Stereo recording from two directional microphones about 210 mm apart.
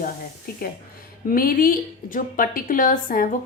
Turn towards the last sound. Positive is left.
turn(degrees=40)  # may be behind; listen again after turning